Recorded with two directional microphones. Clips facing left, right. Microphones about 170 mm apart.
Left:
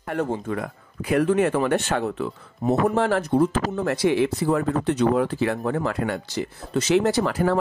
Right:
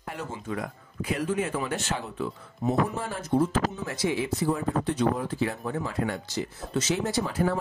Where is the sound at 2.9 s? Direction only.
75° left (ahead or behind).